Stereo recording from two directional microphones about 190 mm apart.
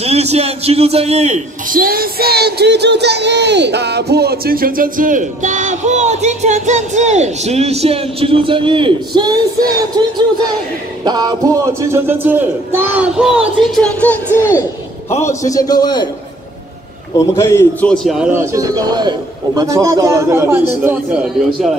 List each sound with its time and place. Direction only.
0.0 s a man's voice: 35° right (ahead or behind); by 13.4 s 5° right (ahead or behind)
13.7 s a man's voice: 5° left (ahead or behind); by 16.1 s 20° left (ahead or behind)
17.4 s a man's voice: 15° left (ahead or behind); by 21.7 s 5° right (ahead or behind)